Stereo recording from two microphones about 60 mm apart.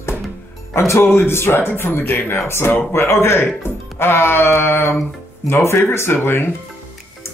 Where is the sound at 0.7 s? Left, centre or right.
Left.